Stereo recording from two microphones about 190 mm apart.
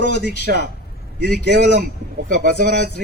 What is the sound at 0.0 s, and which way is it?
Speech, 60° left (ahead or behind).